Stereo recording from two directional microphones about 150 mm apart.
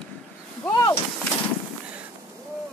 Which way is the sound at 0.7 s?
30° left (ahead or behind).